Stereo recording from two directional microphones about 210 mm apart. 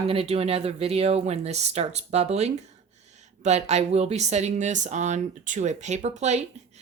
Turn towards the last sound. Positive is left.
turn(degrees=-30)  # may be behind; listen again after turning